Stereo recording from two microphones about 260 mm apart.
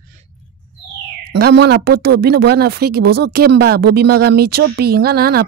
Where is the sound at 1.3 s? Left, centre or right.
Right.